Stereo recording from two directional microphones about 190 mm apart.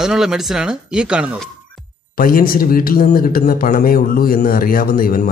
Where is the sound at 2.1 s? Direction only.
50° left (ahead or behind).